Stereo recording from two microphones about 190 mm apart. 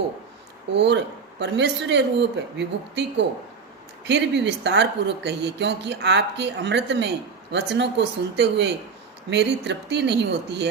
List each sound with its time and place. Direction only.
0.7 s speech: 65° right (ahead or behind)